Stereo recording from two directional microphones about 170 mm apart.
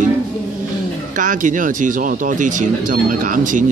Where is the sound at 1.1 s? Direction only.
50° right (ahead or behind).